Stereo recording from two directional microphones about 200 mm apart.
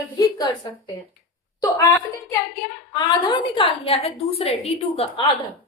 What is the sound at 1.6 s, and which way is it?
A woman's voice, 15° left (ahead or behind).